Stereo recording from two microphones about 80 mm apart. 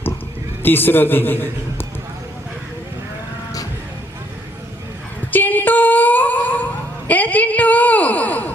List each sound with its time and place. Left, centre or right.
0.6 s a man's voice: left
5.3 s a sound: left
7.1 s a woman's voice: centre